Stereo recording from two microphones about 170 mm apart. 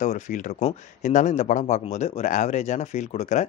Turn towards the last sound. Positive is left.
turn(degrees=40)  # may be behind; listen again after turning